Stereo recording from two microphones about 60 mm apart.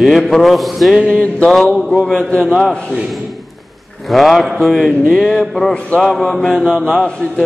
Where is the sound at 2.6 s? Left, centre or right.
Centre.